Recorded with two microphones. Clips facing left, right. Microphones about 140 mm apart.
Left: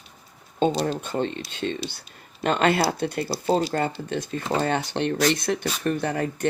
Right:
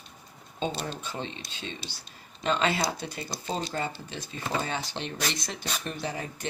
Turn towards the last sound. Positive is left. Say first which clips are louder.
# left 9 dB
turn(degrees=55)  # may be behind; listen again after turning